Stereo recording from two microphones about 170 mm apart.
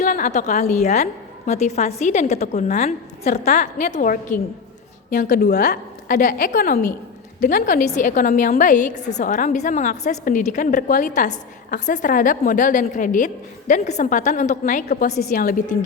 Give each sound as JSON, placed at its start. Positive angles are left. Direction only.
{"t": 0.0, "sound": "a woman's voice", "side_deg": 45}
{"t": 5.1, "sound": "a woman's voice", "side_deg": 60}